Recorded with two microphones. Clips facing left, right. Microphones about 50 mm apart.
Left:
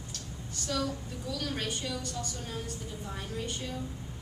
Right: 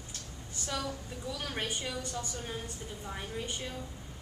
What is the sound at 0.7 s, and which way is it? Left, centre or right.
A woman's voice, right.